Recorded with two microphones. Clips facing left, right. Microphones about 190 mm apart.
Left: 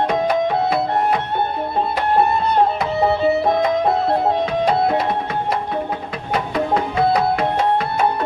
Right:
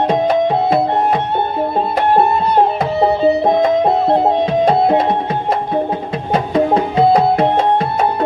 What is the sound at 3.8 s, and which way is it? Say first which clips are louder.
Music: right 4 dB; 25° right (ahead or behind).